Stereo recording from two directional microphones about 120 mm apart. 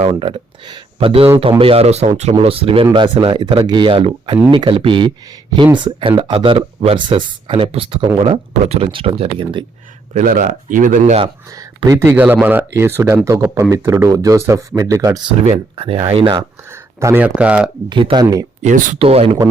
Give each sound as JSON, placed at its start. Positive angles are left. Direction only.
{"t": 0.0, "sound": "speech", "side_deg": -50}
{"t": 2.4, "sound": "speech", "side_deg": -50}
{"t": 2.8, "sound": "speech", "side_deg": -40}
{"t": 8.6, "sound": "speech", "side_deg": -55}
{"t": 10.2, "sound": "speech", "side_deg": -90}
{"t": 11.5, "sound": "speech", "side_deg": -30}
{"t": 12.1, "sound": "speech", "side_deg": -15}
{"t": 15.4, "sound": "speech", "side_deg": -55}
{"t": 17.0, "sound": "speech", "side_deg": -25}
{"t": 17.2, "sound": "speech", "side_deg": -10}
{"t": 17.8, "sound": "speech", "side_deg": -40}
{"t": 18.9, "sound": "speech", "side_deg": -55}